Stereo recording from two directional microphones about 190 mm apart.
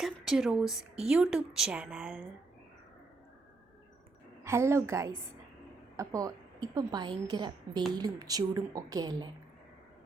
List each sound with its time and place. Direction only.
0.0 s speech: centre (ahead or behind)
4.4 s a woman's voice: 15° right (ahead or behind)